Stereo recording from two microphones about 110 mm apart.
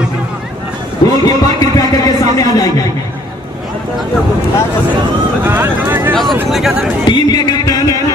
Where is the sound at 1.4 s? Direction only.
35° left (ahead or behind).